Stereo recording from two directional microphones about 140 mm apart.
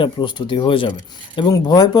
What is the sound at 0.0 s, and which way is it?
Speech, 35° left (ahead or behind).